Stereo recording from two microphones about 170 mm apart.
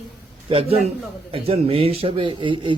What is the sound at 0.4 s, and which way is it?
Speech, 35° right (ahead or behind).